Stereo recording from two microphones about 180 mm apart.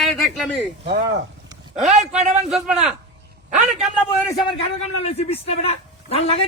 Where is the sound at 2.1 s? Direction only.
40° right (ahead or behind).